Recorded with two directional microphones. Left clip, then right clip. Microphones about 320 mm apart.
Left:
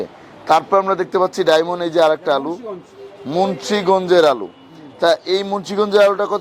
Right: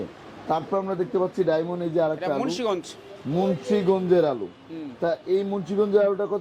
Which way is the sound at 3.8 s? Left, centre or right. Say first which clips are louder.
Left 9 dB; centre.